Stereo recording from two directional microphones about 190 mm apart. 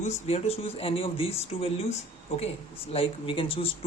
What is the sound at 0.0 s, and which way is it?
Speech, 35° left (ahead or behind).